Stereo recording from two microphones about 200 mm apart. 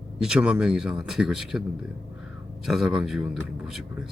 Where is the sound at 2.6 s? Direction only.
Centre (ahead or behind).